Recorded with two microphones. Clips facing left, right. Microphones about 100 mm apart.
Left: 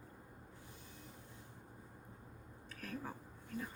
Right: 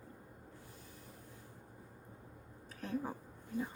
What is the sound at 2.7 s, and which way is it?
Speech, 25° right (ahead or behind).